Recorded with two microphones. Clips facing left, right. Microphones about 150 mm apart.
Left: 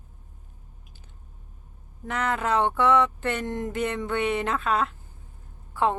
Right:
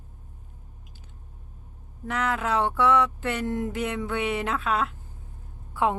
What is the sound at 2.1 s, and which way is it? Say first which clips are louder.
Speech: left 1 dB; centre (ahead or behind).